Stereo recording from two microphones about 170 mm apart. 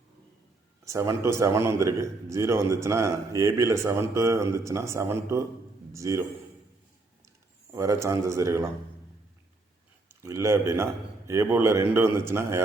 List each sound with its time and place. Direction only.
0.9 s a man's voice: 15° right (ahead or behind)
7.7 s a man's voice: 15° right (ahead or behind)
10.1 s a man's voice: 15° right (ahead or behind)